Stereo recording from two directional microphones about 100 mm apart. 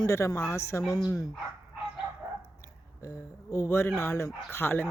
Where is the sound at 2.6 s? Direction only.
30° left (ahead or behind).